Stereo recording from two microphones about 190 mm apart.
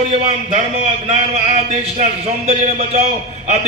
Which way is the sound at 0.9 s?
35° right (ahead or behind).